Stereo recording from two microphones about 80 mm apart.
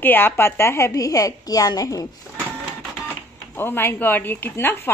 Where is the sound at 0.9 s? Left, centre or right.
Left.